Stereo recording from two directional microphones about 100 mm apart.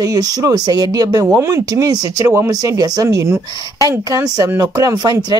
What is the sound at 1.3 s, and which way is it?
Speech, 25° right (ahead or behind).